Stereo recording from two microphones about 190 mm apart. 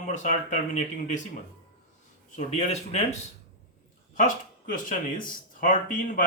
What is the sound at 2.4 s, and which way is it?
Speech, 35° left (ahead or behind).